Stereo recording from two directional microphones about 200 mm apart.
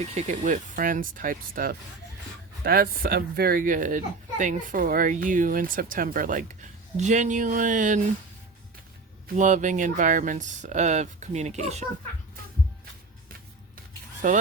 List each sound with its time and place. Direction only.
0.1 s a woman's voice: 35° right (ahead or behind)
9.3 s speech: 40° right (ahead or behind)
14.2 s speech: 40° right (ahead or behind)